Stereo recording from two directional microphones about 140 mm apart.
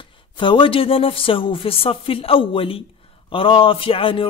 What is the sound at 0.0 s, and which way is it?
A man's voice, 35° left (ahead or behind).